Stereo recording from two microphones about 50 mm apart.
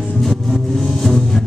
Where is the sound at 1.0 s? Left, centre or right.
Centre.